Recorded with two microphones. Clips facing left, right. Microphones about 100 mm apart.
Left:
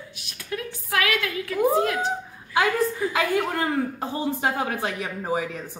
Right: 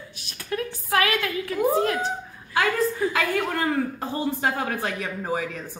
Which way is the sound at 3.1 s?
20° left (ahead or behind).